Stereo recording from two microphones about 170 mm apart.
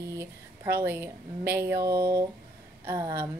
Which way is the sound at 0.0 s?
15° right (ahead or behind).